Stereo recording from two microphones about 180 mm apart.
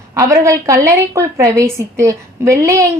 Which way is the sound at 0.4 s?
15° right (ahead or behind).